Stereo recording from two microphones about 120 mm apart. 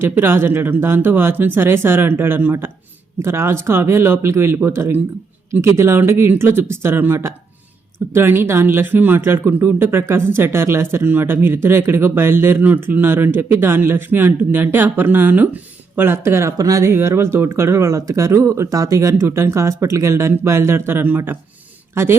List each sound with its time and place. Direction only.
0.0 s speech: 20° right (ahead or behind)